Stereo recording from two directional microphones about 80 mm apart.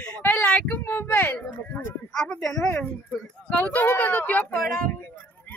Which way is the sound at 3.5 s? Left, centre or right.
Centre.